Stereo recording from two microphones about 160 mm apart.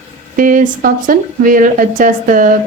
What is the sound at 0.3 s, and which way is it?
A woman's voice, 55° right (ahead or behind).